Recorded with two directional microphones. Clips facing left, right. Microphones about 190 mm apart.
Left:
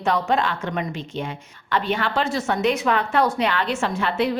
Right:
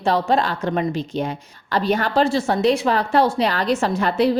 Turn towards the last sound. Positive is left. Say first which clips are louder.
# right 4 dB
turn(degrees=-35)  # may be behind; listen again after turning